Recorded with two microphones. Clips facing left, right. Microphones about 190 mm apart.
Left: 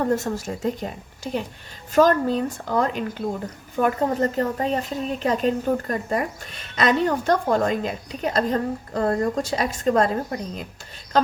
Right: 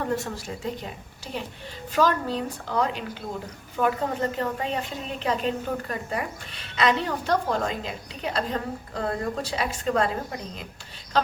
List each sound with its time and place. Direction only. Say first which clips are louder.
0.2 s a woman's voice: left 6 dB; 45° left (ahead or behind)